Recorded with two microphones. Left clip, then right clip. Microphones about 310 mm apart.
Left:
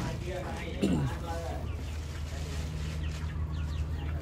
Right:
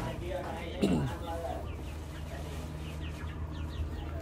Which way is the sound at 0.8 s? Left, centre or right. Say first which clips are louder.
Even; centre.